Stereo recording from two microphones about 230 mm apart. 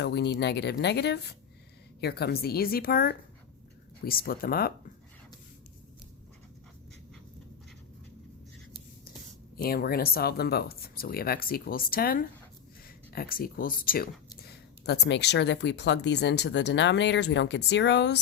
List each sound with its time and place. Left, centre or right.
0.0 s speech: left
9.6 s speech: left